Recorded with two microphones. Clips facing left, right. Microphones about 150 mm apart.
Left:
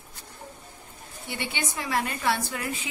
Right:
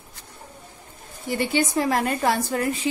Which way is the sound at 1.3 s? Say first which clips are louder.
Right 10 dB; 40° right (ahead or behind).